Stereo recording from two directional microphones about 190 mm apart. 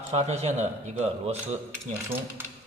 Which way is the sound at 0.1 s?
35° right (ahead or behind).